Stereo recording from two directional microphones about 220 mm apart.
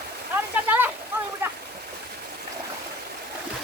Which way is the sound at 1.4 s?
10° right (ahead or behind).